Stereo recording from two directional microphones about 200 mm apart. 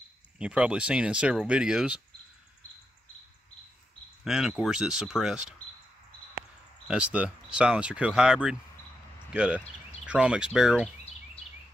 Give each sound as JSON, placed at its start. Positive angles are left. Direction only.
{"t": 0.4, "sound": "speech", "side_deg": -5}
{"t": 4.2, "sound": "speech", "side_deg": 0}
{"t": 6.9, "sound": "speech", "side_deg": -5}